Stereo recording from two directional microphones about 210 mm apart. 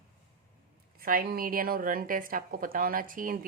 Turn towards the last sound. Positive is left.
turn(degrees=-40)  # may be behind; listen again after turning